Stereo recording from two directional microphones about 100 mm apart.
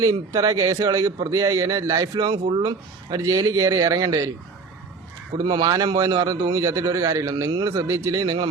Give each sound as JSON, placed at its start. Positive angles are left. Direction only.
{"t": 0.0, "sound": "a man's voice", "side_deg": -35}
{"t": 3.2, "sound": "a man's voice", "side_deg": -30}
{"t": 5.4, "sound": "a man's voice", "side_deg": -45}